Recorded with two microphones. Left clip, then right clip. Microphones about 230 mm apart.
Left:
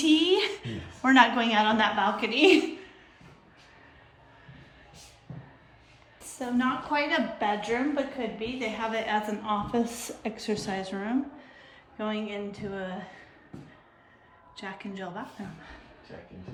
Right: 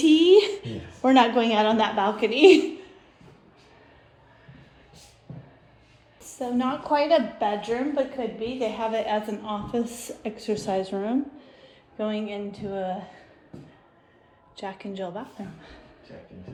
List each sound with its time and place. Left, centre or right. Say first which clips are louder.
0.0 s a sound: right 7 dB; centre
1.4 s a woman's voice: right 3 dB; centre
6.4 s a woman's voice: right 2 dB; centre
10.5 s a woman's voice: right 7 dB; centre
11.6 s a sound: right 4 dB; centre
12.3 s a woman's voice: right 3 dB; centre
14.8 s a woman's voice: right 4 dB; centre